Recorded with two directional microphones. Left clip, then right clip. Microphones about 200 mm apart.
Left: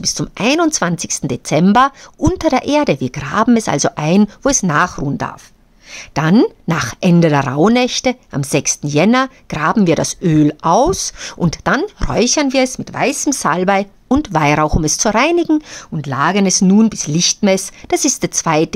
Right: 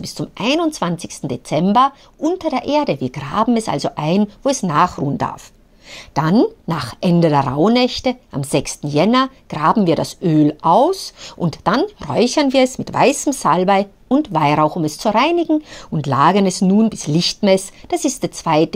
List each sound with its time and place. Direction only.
0.0 s speech: 25° left (ahead or behind)
6.3 s speech: 25° left (ahead or behind)
12.7 s a woman's voice: centre (ahead or behind)
13.3 s speech: 15° left (ahead or behind)
14.0 s speech: 30° left (ahead or behind)
14.4 s speech: 20° left (ahead or behind)
15.9 s a woman's voice: centre (ahead or behind)
17.8 s speech: 25° left (ahead or behind)